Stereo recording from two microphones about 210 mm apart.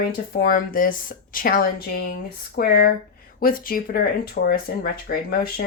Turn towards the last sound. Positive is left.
turn(degrees=45)  # may be behind; listen again after turning